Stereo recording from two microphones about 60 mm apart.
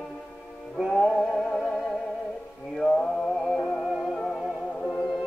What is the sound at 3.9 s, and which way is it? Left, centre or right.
Music, centre.